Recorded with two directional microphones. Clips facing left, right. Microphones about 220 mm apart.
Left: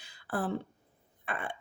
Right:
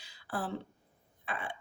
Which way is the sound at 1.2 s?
55° left (ahead or behind).